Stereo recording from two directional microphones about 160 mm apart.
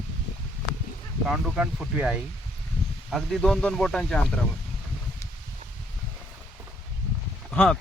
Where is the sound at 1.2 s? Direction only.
5° right (ahead or behind).